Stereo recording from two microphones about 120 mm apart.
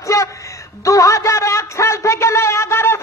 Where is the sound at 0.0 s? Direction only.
25° left (ahead or behind).